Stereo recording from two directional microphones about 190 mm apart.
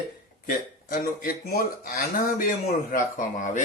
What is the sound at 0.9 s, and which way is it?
Speech, 50° left (ahead or behind).